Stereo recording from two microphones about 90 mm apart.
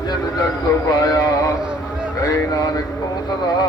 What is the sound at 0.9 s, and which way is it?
Speech, 45° left (ahead or behind).